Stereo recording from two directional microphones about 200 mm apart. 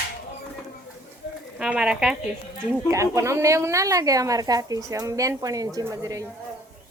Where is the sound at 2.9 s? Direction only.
15° right (ahead or behind).